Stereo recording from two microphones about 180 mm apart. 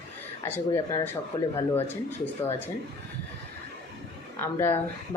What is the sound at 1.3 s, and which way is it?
Speech, 20° left (ahead or behind).